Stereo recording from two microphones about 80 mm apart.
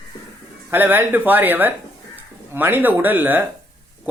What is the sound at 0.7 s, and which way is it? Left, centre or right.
Speech, right.